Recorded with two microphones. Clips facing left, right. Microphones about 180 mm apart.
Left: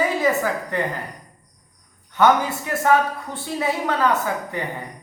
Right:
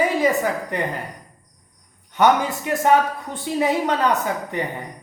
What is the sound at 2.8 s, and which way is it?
A woman's voice, 20° right (ahead or behind).